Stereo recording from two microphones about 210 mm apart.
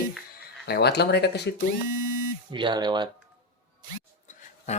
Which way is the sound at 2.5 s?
20° right (ahead or behind).